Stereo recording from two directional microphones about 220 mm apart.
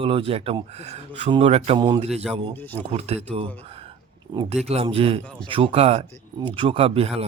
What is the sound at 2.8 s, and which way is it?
Speech, 30° right (ahead or behind).